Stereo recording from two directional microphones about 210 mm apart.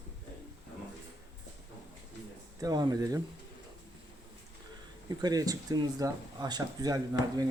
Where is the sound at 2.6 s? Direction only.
20° right (ahead or behind).